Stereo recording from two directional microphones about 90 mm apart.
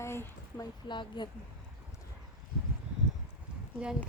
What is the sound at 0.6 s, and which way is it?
Speech, 60° left (ahead or behind).